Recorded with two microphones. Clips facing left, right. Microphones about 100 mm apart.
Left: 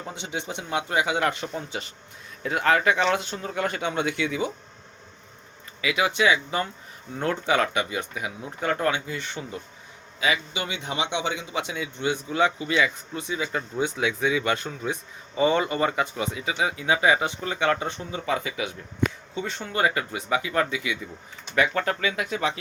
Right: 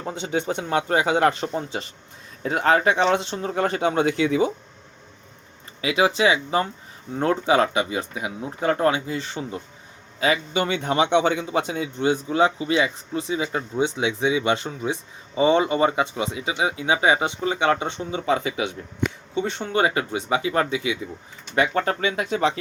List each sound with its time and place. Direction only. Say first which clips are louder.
0.0 s speech: right 7 dB; 40° right (ahead or behind)
5.8 s a man's voice: right 3 dB; 30° right (ahead or behind)
10.2 s a man's voice: right 5 dB; 40° right (ahead or behind)